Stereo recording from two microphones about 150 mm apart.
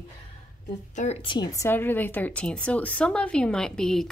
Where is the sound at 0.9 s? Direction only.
50° left (ahead or behind).